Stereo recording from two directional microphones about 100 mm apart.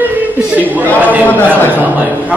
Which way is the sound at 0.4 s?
15° right (ahead or behind).